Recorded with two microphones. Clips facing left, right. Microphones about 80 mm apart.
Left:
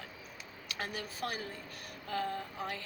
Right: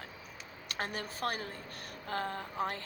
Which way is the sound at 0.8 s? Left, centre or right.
Right.